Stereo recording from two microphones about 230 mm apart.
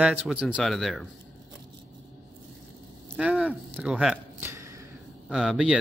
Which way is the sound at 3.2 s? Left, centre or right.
Centre.